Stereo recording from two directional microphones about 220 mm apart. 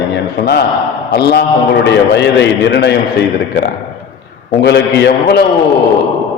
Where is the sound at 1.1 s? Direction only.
45° left (ahead or behind).